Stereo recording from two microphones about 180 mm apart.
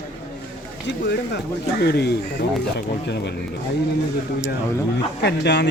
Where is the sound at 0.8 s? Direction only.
70° left (ahead or behind).